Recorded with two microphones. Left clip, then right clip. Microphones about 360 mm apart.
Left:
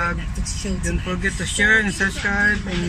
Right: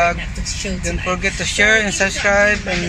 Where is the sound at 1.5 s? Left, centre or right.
Right.